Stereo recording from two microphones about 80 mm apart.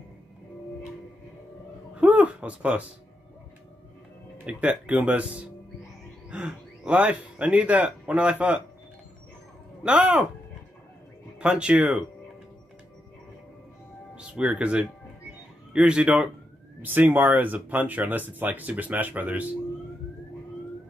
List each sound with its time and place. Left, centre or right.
2.0 s a sound: centre
4.5 s speech: centre
9.8 s speech: centre
11.3 s speech: centre
14.1 s speech: centre
16.8 s speech: right